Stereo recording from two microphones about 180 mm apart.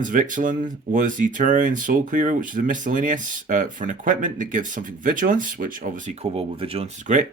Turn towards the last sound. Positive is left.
turn(degrees=-40)  # may be behind; listen again after turning